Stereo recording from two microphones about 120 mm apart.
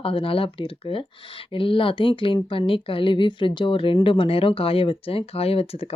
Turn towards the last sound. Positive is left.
turn(degrees=55)  # may be behind; listen again after turning